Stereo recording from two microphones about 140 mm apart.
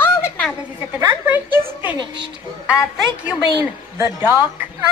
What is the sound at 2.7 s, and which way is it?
Speech, 10° right (ahead or behind).